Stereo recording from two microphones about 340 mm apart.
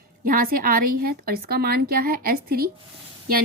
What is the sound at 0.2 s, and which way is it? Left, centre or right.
A woman's voice, right.